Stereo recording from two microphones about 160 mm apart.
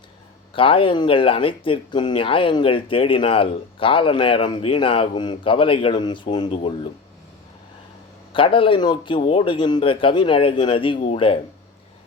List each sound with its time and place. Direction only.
0.5 s speech: 35° left (ahead or behind)
8.3 s speech: 35° left (ahead or behind)